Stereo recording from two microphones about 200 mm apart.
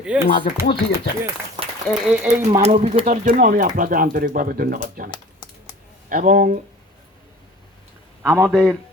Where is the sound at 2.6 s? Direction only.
35° right (ahead or behind).